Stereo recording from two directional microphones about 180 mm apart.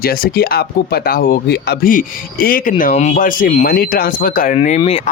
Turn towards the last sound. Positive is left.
turn(degrees=40)  # may be behind; listen again after turning